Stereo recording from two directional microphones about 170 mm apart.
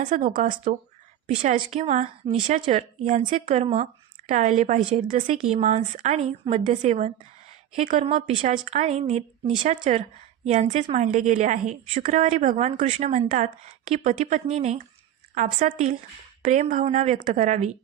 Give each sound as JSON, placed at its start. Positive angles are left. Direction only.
{"t": 0.0, "sound": "a woman's voice", "side_deg": -45}
{"t": 1.6, "sound": "a woman's voice", "side_deg": -35}